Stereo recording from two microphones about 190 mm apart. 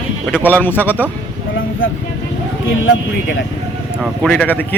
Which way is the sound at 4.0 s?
Centre (ahead or behind).